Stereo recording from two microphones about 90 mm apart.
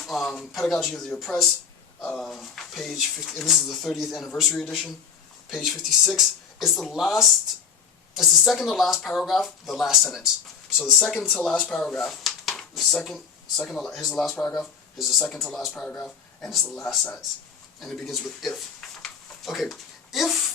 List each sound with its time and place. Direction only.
0.0 s speech: centre (ahead or behind)
15.7 s speech: 15° left (ahead or behind)
16.0 s speech: 5° left (ahead or behind)
19.0 s a sound: centre (ahead or behind)